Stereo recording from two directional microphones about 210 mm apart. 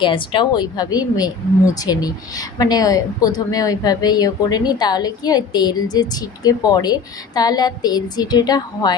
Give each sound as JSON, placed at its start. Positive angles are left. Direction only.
{"t": 0.0, "sound": "speech", "side_deg": 25}